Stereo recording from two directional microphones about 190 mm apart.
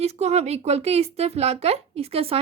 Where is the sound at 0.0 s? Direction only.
35° right (ahead or behind).